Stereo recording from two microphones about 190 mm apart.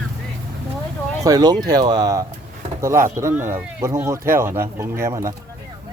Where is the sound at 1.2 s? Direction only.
20° right (ahead or behind).